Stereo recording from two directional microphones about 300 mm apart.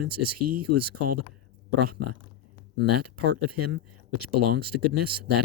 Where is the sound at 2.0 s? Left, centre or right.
Right.